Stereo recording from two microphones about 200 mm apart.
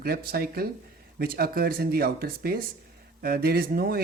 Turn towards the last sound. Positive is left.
turn(degrees=-50)  # may be behind; listen again after turning